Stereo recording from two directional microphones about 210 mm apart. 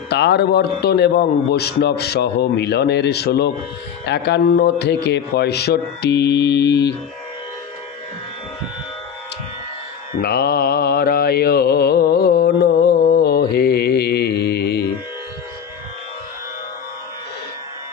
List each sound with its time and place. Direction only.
0.1 s a man's voice: 55° left (ahead or behind)
10.1 s mantra: 50° left (ahead or behind)